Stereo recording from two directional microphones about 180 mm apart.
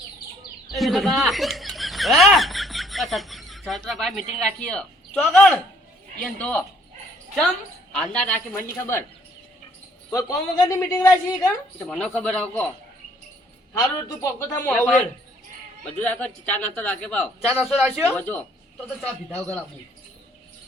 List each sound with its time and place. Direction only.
0.7 s a sound: centre (ahead or behind)
4.4 s a man's voice: 5° left (ahead or behind)
7.9 s a woman's voice: 5° left (ahead or behind)
10.1 s a woman's voice: 20° left (ahead or behind)
13.7 s a woman's voice: 15° left (ahead or behind); by 18.1 s 5° right (ahead or behind)
18.1 s a woman's voice: 10° left (ahead or behind)